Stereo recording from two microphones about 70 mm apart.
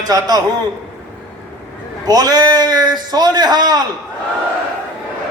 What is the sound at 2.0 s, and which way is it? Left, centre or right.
A man's voice, right.